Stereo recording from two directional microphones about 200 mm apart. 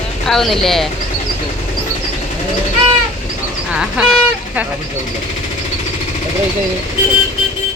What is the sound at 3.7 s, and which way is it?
Speech, 5° right (ahead or behind).